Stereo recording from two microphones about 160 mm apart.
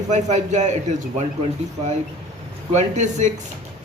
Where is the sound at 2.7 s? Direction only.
45° right (ahead or behind).